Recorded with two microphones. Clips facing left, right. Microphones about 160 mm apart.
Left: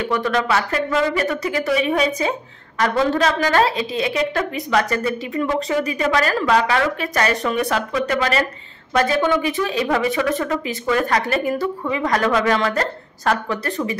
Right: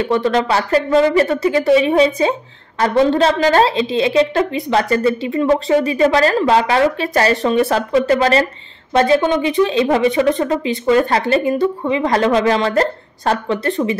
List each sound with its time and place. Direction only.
0.0 s a woman's voice: 30° right (ahead or behind)